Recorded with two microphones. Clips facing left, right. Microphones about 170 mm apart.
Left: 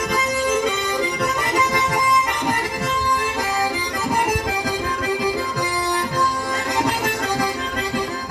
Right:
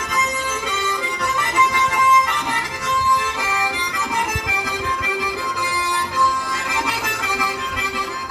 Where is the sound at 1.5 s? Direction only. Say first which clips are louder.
Right 2 dB; 40° left (ahead or behind).